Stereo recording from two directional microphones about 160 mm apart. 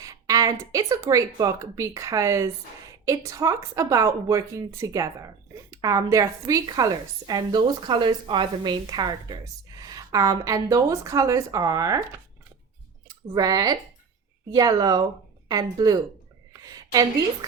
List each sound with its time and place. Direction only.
0.0 s a woman's voice: 20° right (ahead or behind)
13.3 s a woman's voice: 20° right (ahead or behind)
16.5 s a sound: 25° right (ahead or behind)